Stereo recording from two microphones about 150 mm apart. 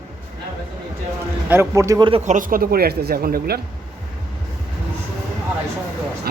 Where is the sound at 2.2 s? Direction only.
60° right (ahead or behind); by 3.6 s 90° right.